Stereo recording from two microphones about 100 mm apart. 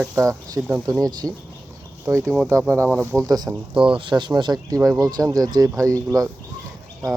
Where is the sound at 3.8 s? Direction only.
60° right (ahead or behind); by 6.2 s 35° right (ahead or behind).